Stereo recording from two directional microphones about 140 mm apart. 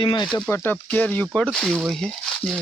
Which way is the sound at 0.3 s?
10° left (ahead or behind).